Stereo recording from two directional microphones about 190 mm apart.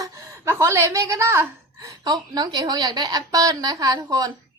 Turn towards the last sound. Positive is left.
turn(degrees=-20)  # may be behind; listen again after turning